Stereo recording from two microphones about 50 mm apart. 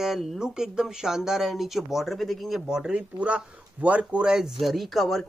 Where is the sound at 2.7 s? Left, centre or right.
Centre.